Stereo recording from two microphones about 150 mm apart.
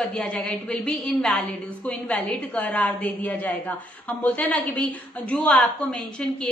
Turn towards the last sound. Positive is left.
turn(degrees=5)  # may be behind; listen again after turning